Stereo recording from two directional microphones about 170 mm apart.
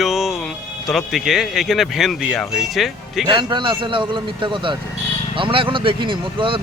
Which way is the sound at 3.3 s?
25° right (ahead or behind).